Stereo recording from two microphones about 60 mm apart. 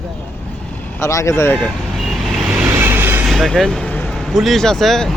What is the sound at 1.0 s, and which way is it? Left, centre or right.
Speech, left.